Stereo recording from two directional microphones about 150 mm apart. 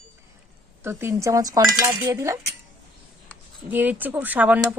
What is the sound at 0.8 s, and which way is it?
Speech, 15° right (ahead or behind).